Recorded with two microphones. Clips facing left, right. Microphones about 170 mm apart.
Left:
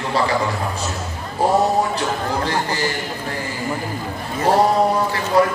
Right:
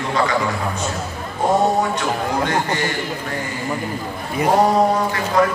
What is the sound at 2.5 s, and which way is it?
Speech, 30° left (ahead or behind).